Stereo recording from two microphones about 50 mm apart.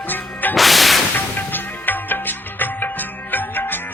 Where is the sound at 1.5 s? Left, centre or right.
Left.